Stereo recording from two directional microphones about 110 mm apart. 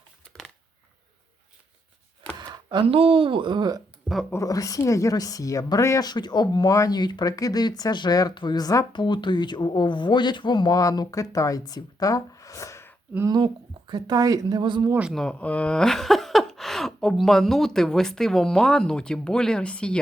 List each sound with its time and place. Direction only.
2.4 s chopping: 40° right (ahead or behind)
2.8 s speech: 60° right (ahead or behind); by 3.8 s 40° right (ahead or behind)
4.3 s speech: 30° left (ahead or behind)
6.1 s speech: 40° left (ahead or behind)
13.3 s speech: 45° right (ahead or behind)
15.1 s speech: 5° left (ahead or behind)